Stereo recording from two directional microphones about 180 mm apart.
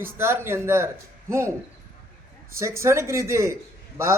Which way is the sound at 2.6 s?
15° right (ahead or behind).